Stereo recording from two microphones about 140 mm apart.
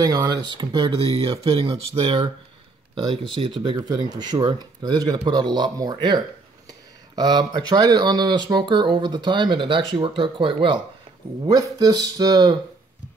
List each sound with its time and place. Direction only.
0.0 s speech: 30° right (ahead or behind)